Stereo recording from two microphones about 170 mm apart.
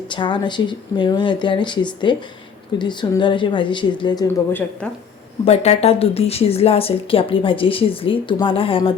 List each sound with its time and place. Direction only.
0.1 s speech: 25° left (ahead or behind)
5.5 s speech: 35° left (ahead or behind)